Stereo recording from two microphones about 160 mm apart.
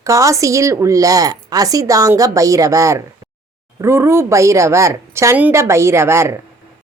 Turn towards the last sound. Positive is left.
turn(degrees=-15)  # may be behind; listen again after turning